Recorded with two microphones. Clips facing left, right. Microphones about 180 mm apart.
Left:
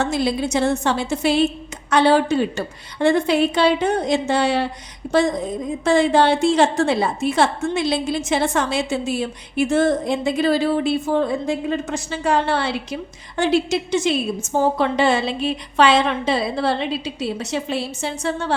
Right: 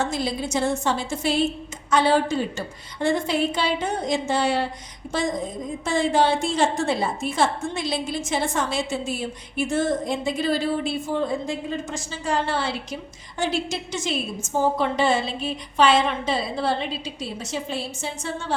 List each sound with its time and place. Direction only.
0.0 s a woman's voice: 70° left (ahead or behind)